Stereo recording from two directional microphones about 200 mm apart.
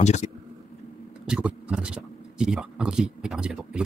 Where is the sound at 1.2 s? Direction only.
5° right (ahead or behind).